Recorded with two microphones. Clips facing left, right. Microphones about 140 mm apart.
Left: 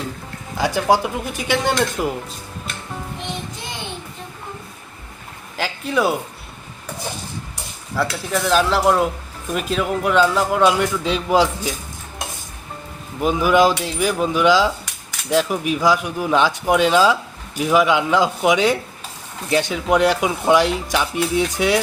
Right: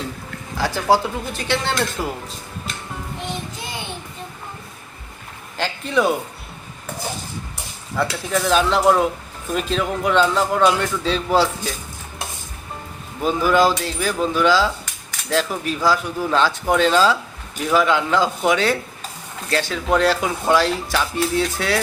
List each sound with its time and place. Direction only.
0.5 s speech: 15° left (ahead or behind)
5.5 s speech: 5° left (ahead or behind)
7.9 s speech: centre (ahead or behind)
13.2 s speech: 15° left (ahead or behind)